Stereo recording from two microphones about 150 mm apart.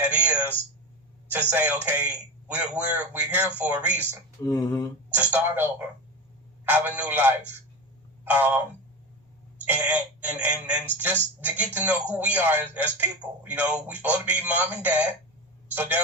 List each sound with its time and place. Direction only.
0.0 s a sound: 10° right (ahead or behind)
1.3 s a man's voice: 10° right (ahead or behind)
4.4 s speech: 25° left (ahead or behind)
5.1 s a man's voice: 10° right (ahead or behind)
6.7 s a man's voice: 10° right (ahead or behind)
9.6 s a man's voice: 10° right (ahead or behind)